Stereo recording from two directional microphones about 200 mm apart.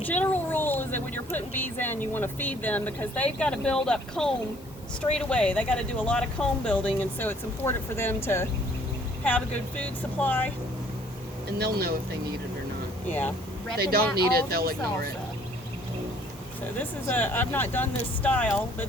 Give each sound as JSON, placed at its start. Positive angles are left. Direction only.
{"t": 0.0, "sound": "speech", "side_deg": 10}
{"t": 13.1, "sound": "speech", "side_deg": 10}
{"t": 13.7, "sound": "speech", "side_deg": -50}
{"t": 16.7, "sound": "speech", "side_deg": 10}